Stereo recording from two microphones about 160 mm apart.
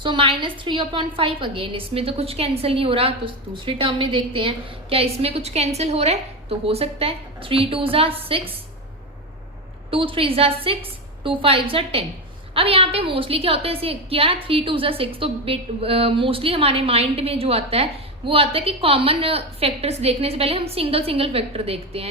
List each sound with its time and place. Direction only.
0.0 s a woman's voice: 30° right (ahead or behind)
9.9 s a woman's voice: 35° right (ahead or behind)